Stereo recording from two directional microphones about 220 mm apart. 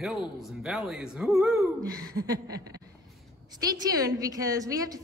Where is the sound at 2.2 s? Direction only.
15° right (ahead or behind).